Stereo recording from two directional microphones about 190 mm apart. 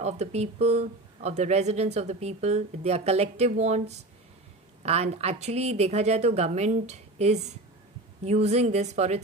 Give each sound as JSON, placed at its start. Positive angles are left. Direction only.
{"t": 0.0, "sound": "speech", "side_deg": -35}